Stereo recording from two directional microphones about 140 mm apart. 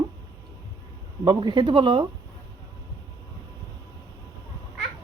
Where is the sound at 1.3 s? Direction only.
35° right (ahead or behind).